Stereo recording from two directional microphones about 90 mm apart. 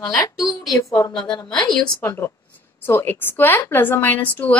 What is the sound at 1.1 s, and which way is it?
Speech, 60° left (ahead or behind).